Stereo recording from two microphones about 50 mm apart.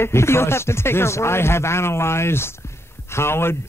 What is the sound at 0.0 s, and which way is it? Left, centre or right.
Speech, left.